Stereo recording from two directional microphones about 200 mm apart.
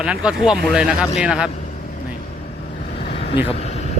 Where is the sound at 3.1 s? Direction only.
30° left (ahead or behind).